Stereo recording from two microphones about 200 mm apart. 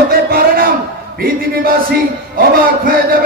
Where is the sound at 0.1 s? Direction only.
50° right (ahead or behind).